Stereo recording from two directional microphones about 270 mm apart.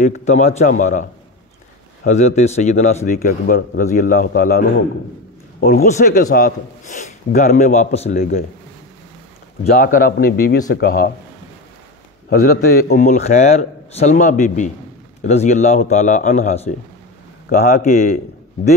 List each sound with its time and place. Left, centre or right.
0.0 s a man's voice: left
2.0 s a man's voice: left
5.9 s a man's voice: left
9.7 s a man's voice: left
12.4 s a man's voice: left